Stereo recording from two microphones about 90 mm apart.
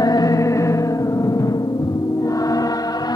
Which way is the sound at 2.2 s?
40° left (ahead or behind).